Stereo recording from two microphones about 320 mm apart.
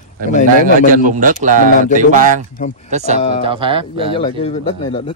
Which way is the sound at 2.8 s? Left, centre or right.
Right.